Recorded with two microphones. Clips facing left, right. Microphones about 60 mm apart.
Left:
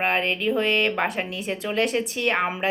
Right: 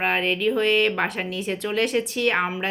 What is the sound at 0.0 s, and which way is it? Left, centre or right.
Speech, centre.